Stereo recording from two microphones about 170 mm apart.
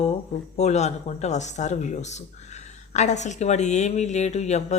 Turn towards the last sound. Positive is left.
turn(degrees=40)  # may be behind; listen again after turning